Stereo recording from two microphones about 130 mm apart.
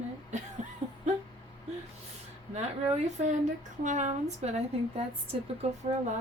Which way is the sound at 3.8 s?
70° right (ahead or behind).